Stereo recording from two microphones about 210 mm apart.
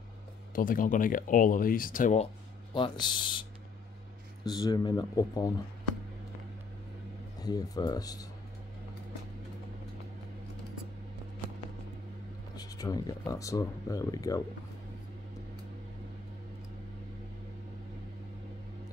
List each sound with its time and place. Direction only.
0.6 s speech: 40° left (ahead or behind)
2.7 s speech: 20° left (ahead or behind)
4.5 s speech: 20° left (ahead or behind)
7.3 s speech: 20° left (ahead or behind)
12.5 s speech: 15° left (ahead or behind)